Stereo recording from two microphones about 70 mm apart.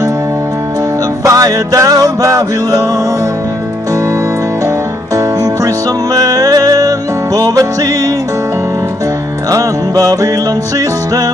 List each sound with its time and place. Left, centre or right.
1.2 s music: right
5.1 s music: right
9.5 s music: right